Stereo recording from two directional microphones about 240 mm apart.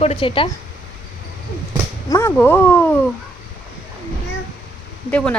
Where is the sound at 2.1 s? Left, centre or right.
Centre.